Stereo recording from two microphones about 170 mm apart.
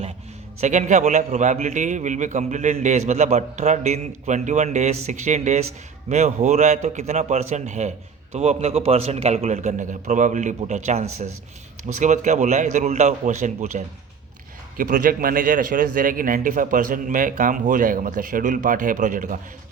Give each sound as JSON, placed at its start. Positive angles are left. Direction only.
{"t": 0.6, "sound": "a man's voice", "side_deg": -45}
{"t": 14.8, "sound": "a man's voice", "side_deg": -55}